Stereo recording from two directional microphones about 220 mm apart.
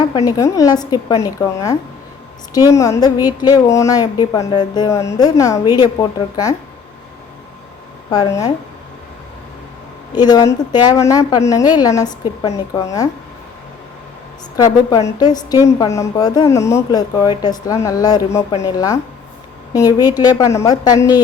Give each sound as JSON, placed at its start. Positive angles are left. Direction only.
{"t": 0.3, "sound": "a woman's voice", "side_deg": 15}
{"t": 8.1, "sound": "a woman's voice", "side_deg": 15}
{"t": 10.2, "sound": "a woman's voice", "side_deg": 20}
{"t": 14.5, "sound": "a woman's voice", "side_deg": 15}